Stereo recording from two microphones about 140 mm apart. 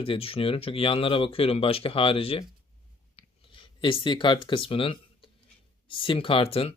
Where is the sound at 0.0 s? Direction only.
40° left (ahead or behind).